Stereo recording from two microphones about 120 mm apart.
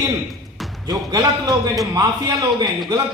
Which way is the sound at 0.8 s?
30° right (ahead or behind).